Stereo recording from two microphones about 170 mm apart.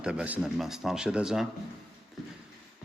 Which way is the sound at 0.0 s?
5° right (ahead or behind).